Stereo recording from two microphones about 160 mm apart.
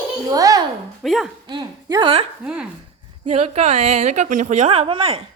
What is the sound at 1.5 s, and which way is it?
Speech, 30° right (ahead or behind).